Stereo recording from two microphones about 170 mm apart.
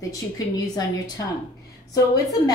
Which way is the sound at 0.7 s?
25° left (ahead or behind).